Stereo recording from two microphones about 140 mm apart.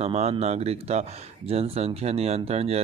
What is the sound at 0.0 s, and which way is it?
Speech, 45° right (ahead or behind).